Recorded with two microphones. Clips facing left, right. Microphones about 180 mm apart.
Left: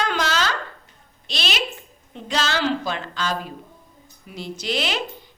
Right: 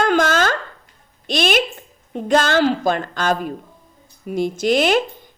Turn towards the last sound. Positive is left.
turn(degrees=-50)  # may be behind; listen again after turning